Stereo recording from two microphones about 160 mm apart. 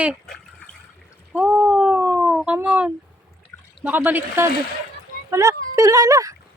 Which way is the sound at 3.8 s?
10° right (ahead or behind).